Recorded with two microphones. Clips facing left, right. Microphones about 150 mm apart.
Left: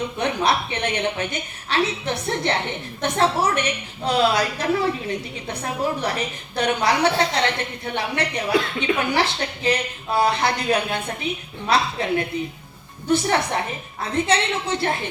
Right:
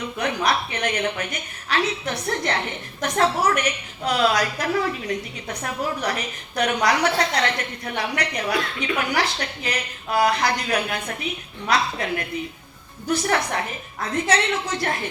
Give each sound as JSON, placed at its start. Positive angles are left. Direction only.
{"t": 0.2, "sound": "a woman's voice", "side_deg": 30}